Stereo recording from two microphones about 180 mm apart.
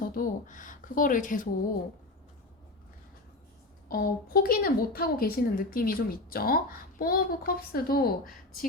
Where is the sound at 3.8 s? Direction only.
55° left (ahead or behind).